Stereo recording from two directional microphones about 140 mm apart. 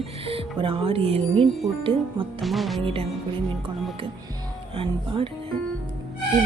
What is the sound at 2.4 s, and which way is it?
Music, centre (ahead or behind).